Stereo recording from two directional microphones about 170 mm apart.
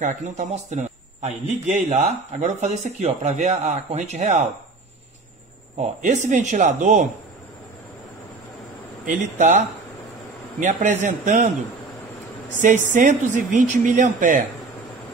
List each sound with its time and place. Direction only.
0.0 s a man's voice: 45° right (ahead or behind)
5.8 s a man's voice: 45° right (ahead or behind)
9.0 s a man's voice: 50° right (ahead or behind)
10.6 s a man's voice: 45° right (ahead or behind)
12.6 s a man's voice: 50° right (ahead or behind)